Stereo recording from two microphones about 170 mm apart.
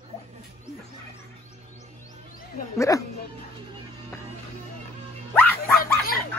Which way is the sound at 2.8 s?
20° left (ahead or behind).